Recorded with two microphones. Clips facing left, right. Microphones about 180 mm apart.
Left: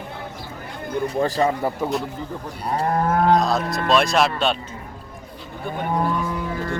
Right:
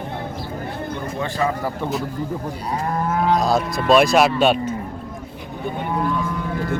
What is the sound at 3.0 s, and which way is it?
Livestock, 50° left (ahead or behind).